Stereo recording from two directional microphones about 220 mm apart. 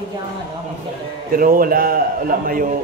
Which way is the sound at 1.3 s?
40° right (ahead or behind).